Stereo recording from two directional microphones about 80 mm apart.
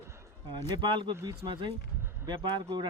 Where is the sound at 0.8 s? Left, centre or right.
Right.